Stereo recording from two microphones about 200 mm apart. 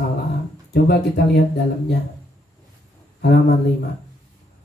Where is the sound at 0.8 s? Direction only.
55° left (ahead or behind).